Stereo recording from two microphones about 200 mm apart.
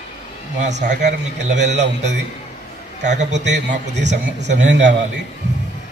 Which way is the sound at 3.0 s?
35° right (ahead or behind).